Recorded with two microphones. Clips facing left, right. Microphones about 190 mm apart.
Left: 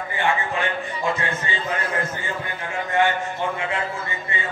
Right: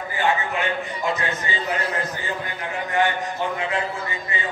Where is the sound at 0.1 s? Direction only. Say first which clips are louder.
Right 1 dB; 30° left (ahead or behind).